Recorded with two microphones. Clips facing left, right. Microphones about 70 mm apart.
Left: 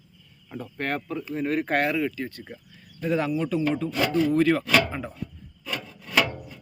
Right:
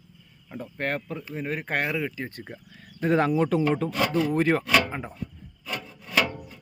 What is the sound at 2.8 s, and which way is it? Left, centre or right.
Speech, right.